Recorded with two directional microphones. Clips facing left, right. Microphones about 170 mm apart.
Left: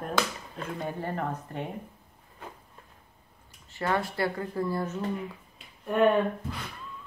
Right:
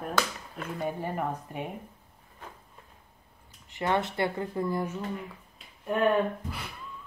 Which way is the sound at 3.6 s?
20° right (ahead or behind).